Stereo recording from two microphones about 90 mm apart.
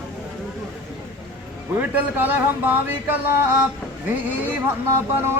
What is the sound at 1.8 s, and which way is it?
A man's voice, 20° right (ahead or behind).